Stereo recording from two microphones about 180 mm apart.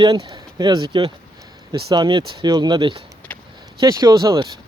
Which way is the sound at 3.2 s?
10° left (ahead or behind).